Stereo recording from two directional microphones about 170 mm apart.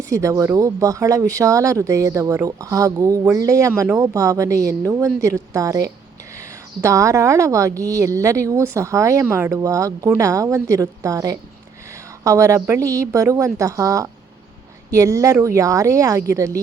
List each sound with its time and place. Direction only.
0.1 s speech: 20° right (ahead or behind)